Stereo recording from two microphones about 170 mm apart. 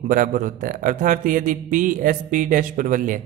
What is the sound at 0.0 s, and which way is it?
A woman's voice, 50° right (ahead or behind).